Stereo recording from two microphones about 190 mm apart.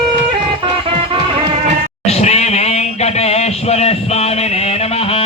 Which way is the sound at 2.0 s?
35° left (ahead or behind).